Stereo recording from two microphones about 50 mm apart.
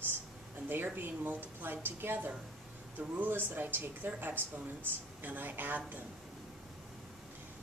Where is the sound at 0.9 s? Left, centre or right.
Right.